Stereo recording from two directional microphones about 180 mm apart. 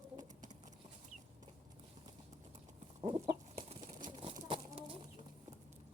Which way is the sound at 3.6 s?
35° right (ahead or behind).